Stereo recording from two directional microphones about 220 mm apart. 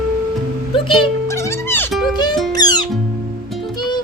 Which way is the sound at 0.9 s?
20° left (ahead or behind).